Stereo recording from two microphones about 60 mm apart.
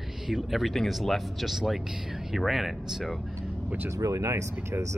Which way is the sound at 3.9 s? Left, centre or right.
Right.